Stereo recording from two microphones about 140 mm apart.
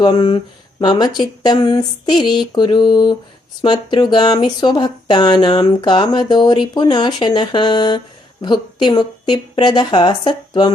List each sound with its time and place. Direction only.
0.0 s speech: 35° left (ahead or behind)